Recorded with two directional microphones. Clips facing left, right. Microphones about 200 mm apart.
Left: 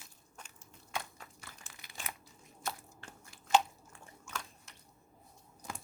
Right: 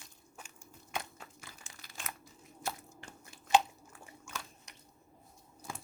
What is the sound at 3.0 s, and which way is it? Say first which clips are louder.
Biting: right 2 dB; 15° right (ahead or behind).